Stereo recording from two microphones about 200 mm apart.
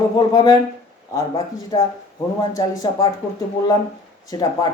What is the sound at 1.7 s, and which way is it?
Speech, 20° left (ahead or behind).